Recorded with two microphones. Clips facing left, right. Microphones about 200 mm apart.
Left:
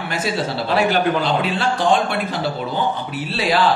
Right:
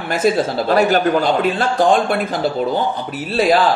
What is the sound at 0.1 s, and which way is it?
Speech, 45° right (ahead or behind).